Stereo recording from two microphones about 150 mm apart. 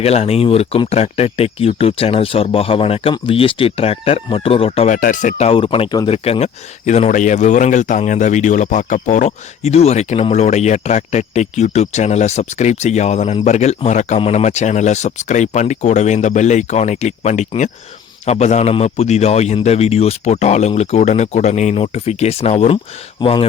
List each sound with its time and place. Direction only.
0.0 s speech: 40° left (ahead or behind)
4.9 s speech: 60° left (ahead or behind)
5.5 s speech: 35° left (ahead or behind)